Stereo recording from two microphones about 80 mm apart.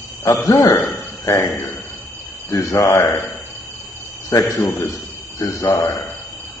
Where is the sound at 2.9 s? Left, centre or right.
Left.